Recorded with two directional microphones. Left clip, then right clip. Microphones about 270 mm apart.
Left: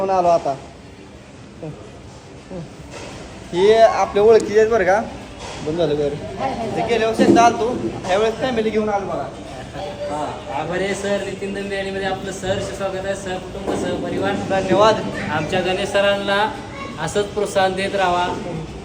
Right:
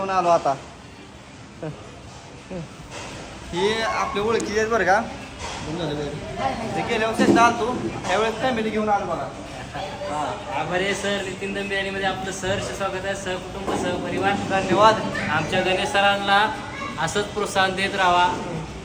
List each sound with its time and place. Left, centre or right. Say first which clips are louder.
0.2 s a man's voice: even; right
3.5 s a man's voice: left 10 dB; centre
10.1 s a man's voice: even; centre